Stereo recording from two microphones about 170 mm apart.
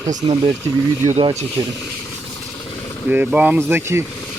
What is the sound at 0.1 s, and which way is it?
Speech, 45° right (ahead or behind).